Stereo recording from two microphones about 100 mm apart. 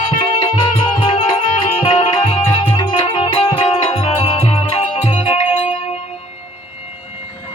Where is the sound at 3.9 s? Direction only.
80° left; by 5.5 s 65° left (ahead or behind).